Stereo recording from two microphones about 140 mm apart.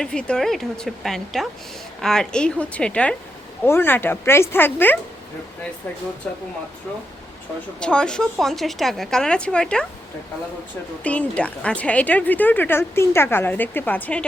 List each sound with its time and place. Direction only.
0.0 s a woman's voice: 5° left (ahead or behind)
6.3 s speech: 10° left (ahead or behind)
7.8 s a woman's voice: 5° left (ahead or behind)
11.0 s speech: 10° left (ahead or behind)